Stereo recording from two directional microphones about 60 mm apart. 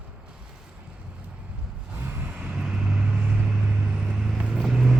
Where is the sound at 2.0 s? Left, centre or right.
Right.